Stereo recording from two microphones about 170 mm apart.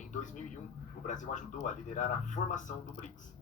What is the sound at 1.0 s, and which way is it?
Speech, 45° left (ahead or behind).